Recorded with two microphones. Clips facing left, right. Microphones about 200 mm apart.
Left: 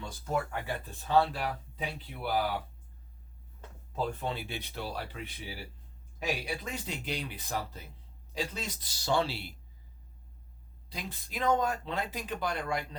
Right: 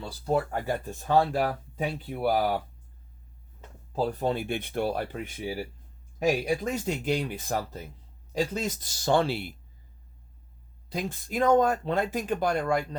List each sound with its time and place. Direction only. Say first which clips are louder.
0.0 s speech: right 6 dB; 35° right (ahead or behind)
3.9 s speech: right 7 dB; 35° right (ahead or behind); by 9.6 s 50° right (ahead or behind)
10.8 s speech: right 10 dB; 50° right (ahead or behind)